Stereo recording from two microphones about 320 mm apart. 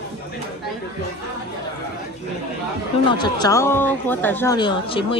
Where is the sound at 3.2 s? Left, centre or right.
Centre.